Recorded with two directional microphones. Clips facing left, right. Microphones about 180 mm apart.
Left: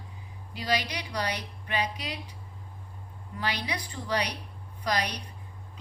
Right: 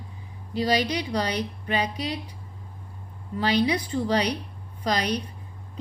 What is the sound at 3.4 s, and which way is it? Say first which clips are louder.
Speech: right 10 dB; 30° right (ahead or behind).